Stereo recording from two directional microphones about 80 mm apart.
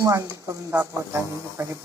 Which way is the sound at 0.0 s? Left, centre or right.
Right.